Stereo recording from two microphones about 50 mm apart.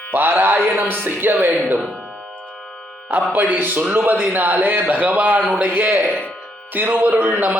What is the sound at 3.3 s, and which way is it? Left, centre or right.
A man's voice, right.